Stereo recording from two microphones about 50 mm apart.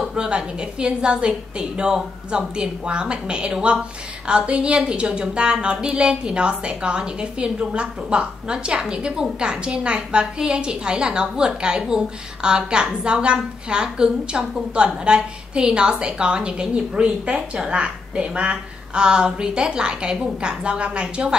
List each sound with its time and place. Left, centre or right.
0.1 s a woman's voice: centre